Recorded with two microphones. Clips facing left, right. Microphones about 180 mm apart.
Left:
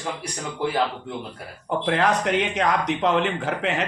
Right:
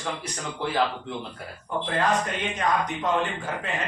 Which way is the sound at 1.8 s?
80° left.